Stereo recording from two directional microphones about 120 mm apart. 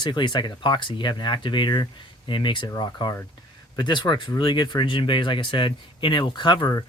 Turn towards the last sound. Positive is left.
turn(degrees=40)  # may be behind; listen again after turning